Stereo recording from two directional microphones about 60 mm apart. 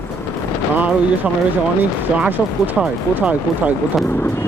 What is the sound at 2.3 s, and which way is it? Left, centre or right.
Speech, right.